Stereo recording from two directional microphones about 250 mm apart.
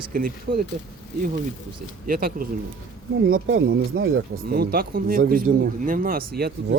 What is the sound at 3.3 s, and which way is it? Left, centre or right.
Speech, right.